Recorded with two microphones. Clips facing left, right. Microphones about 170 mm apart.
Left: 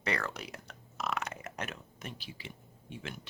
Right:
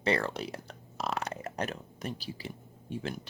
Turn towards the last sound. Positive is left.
turn(degrees=-35)  # may be behind; listen again after turning